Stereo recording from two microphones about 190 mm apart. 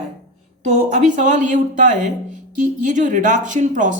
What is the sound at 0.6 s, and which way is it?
Speech, 40° right (ahead or behind).